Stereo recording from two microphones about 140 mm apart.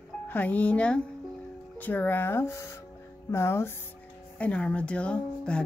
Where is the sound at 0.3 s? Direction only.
10° left (ahead or behind).